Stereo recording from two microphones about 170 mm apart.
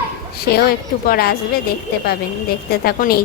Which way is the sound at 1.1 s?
65° left (ahead or behind).